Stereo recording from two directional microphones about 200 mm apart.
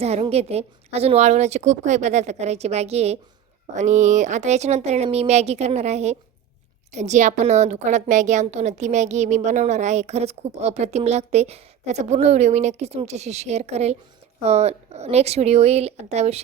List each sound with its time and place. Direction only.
0.0 s a woman's voice: 30° right (ahead or behind)